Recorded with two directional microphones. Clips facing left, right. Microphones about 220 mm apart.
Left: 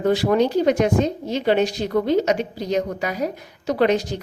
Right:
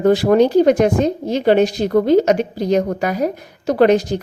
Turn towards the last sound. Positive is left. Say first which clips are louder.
# right 6 dB
turn(degrees=-50)  # may be behind; listen again after turning